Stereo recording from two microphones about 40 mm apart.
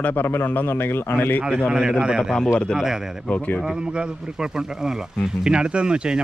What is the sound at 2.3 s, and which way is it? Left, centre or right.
Speech, centre.